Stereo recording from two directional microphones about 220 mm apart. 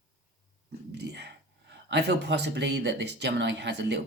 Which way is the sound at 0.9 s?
50° right (ahead or behind).